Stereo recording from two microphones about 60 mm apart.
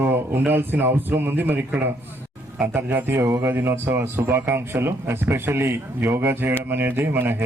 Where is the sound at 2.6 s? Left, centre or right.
Right.